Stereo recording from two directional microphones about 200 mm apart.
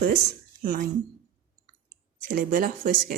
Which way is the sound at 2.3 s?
45° right (ahead or behind).